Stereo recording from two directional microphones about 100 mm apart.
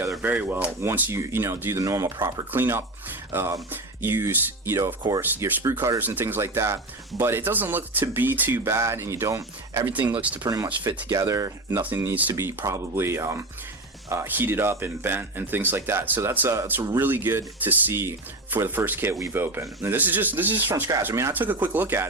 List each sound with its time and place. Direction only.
0.2 s speech: 15° right (ahead or behind); by 9.8 s 35° right (ahead or behind)
9.8 s speech: 15° right (ahead or behind)
10.4 s speech: 35° right (ahead or behind)
11.8 s speech: 20° right (ahead or behind)